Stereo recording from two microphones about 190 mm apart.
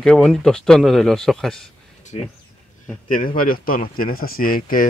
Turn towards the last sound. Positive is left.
turn(degrees=50)  # may be behind; listen again after turning